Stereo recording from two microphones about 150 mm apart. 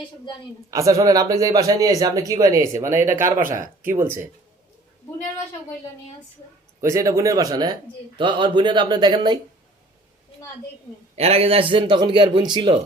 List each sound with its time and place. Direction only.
0.7 s speech: 20° right (ahead or behind)
6.8 s speech: 20° right (ahead or behind)
11.2 s speech: 40° right (ahead or behind)